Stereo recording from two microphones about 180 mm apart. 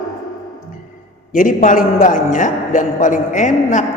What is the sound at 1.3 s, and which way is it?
A man's voice, 45° left (ahead or behind).